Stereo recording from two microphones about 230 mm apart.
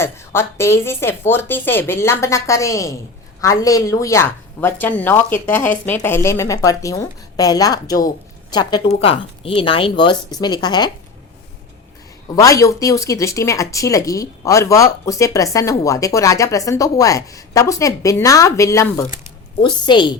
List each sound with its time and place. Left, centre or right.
0.0 s a woman's voice: centre
12.3 s a woman's voice: centre